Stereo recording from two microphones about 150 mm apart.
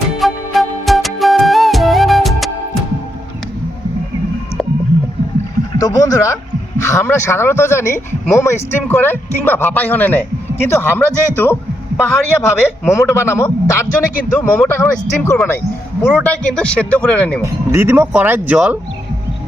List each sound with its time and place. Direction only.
0.2 s music: centre (ahead or behind)
5.7 s a man's voice: 20° left (ahead or behind)
17.7 s speech: 15° right (ahead or behind)